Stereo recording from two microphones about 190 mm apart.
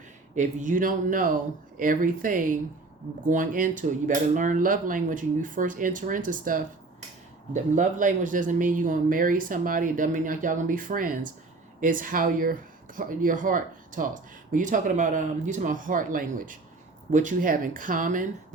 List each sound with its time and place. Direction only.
0.3 s speech: 45° right (ahead or behind)